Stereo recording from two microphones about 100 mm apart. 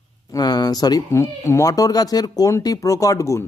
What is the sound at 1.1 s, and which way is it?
Speech, 30° left (ahead or behind).